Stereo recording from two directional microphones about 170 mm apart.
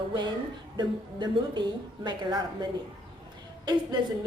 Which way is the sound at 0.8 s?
25° right (ahead or behind).